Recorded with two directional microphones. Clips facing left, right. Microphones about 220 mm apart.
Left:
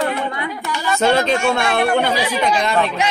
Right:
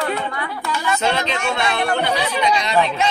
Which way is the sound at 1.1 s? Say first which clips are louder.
Left 6 dB; 50° left (ahead or behind).